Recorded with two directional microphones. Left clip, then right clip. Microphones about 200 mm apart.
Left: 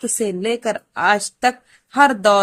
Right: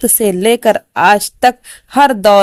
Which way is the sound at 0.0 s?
40° right (ahead or behind).